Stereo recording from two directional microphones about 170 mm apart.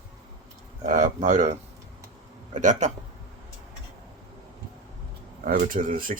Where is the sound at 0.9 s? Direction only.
45° right (ahead or behind).